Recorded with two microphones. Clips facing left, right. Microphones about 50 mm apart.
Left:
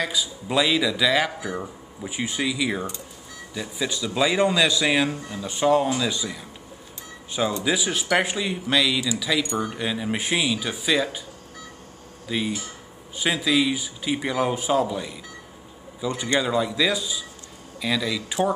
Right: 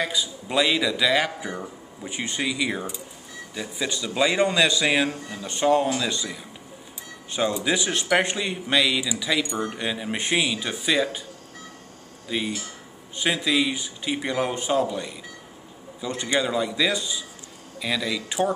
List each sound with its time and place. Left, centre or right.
0.0 s speech: centre
7.5 s speech: centre
12.3 s speech: centre